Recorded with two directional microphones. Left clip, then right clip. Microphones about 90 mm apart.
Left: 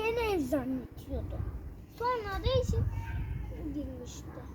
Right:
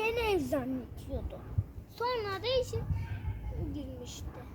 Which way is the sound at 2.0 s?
60° right (ahead or behind).